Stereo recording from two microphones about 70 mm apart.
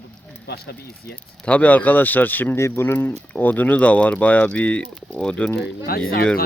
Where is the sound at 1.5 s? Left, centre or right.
Left.